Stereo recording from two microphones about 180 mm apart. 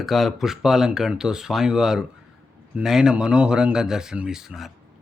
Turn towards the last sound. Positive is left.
turn(degrees=0)  # may be behind; listen again after turning